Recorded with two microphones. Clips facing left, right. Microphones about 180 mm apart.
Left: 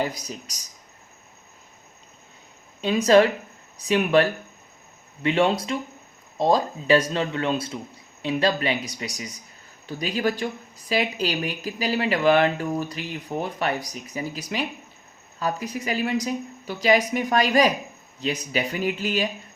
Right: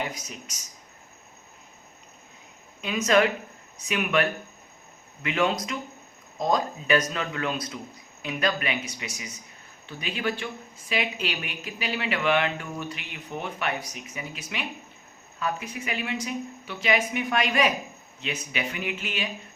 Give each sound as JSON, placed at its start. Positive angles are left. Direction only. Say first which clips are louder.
{"t": 0.0, "sound": "speech", "louder": "left 6 dB", "side_deg": 35}
{"t": 2.8, "sound": "speech", "louder": "left 5 dB", "side_deg": 35}